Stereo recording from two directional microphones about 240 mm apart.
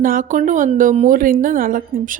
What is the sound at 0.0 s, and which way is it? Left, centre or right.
A woman's voice, right.